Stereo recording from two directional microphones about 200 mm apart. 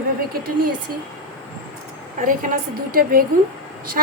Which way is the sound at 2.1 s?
40° right (ahead or behind).